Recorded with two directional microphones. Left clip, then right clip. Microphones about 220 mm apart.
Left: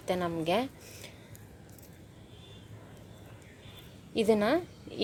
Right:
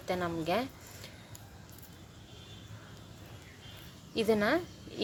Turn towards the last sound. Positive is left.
turn(degrees=25)  # may be behind; listen again after turning